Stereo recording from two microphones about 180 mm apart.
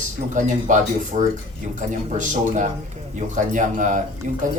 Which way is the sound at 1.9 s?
45° right (ahead or behind).